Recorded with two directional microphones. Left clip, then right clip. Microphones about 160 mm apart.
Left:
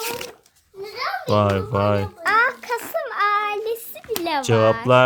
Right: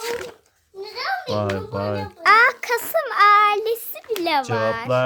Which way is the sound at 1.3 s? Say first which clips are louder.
Left 5 dB; 60° left (ahead or behind).